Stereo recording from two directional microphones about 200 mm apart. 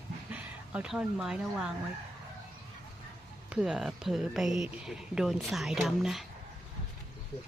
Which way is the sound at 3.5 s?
5° right (ahead or behind).